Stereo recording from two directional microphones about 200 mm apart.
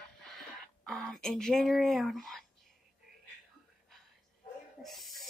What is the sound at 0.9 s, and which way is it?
A woman's voice, 5° left (ahead or behind).